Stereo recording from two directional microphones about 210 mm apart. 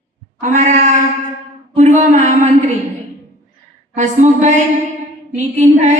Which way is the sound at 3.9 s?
35° right (ahead or behind).